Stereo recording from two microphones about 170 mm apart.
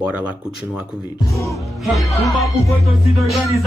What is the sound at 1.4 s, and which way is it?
Music, centre (ahead or behind).